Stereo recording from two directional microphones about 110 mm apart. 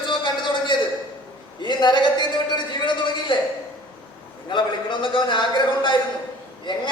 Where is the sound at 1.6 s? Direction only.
45° left (ahead or behind).